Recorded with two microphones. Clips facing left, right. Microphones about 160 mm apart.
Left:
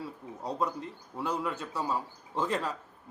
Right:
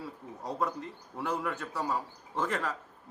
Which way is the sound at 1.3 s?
15° left (ahead or behind).